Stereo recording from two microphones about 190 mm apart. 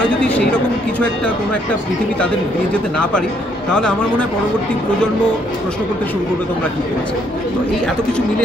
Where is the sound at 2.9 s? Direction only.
5° left (ahead or behind).